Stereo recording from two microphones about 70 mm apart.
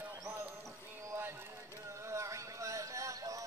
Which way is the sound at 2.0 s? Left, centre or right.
Right.